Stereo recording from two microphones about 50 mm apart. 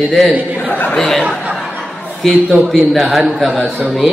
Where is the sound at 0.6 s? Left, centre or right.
Left.